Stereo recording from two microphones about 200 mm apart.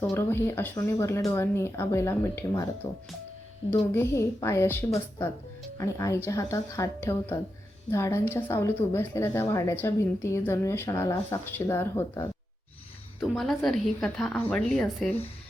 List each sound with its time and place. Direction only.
0.0 s a woman's voice: 15° left (ahead or behind)
3.7 s a woman's voice: 10° left (ahead or behind)
13.1 s a woman's voice: centre (ahead or behind)